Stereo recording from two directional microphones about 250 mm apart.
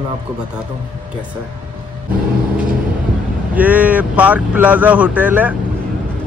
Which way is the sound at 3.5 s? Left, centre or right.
Centre.